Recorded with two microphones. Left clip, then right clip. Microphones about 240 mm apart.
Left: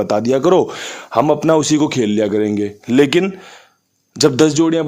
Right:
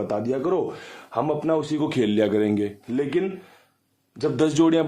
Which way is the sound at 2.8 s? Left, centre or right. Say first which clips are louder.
Left 14 dB; left.